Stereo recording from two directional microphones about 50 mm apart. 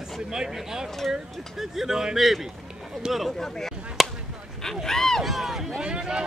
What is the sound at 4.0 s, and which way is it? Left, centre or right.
Basketball bounce, centre.